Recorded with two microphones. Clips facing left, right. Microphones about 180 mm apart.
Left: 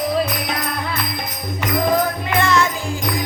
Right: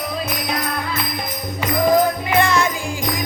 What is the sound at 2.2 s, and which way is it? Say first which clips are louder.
Music: even; 15° right (ahead or behind).